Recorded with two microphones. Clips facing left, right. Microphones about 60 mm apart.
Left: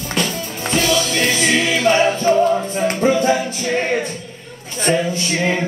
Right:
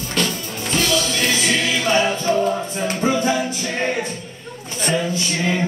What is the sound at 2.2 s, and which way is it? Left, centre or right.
Music, left.